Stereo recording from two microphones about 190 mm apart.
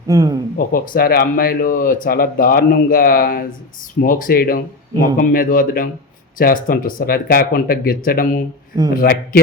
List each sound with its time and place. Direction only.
0.1 s speech: 20° right (ahead or behind)
0.5 s speech: 50° left (ahead or behind)